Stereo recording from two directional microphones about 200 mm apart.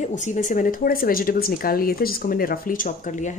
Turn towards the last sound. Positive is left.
turn(degrees=40)  # may be behind; listen again after turning